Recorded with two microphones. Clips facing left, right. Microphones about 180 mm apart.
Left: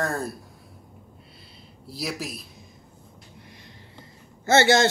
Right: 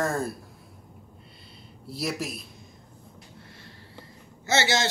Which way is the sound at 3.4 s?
15° left (ahead or behind).